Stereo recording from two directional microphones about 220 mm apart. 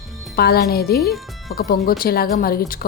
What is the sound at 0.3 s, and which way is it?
A woman's voice, 45° left (ahead or behind).